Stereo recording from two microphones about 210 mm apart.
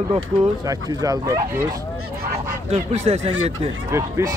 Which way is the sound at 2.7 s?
30° right (ahead or behind).